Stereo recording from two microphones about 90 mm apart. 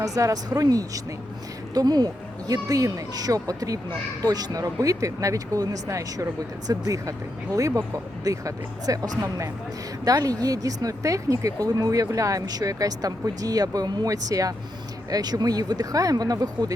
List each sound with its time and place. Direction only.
0.0 s speech: 40° right (ahead or behind)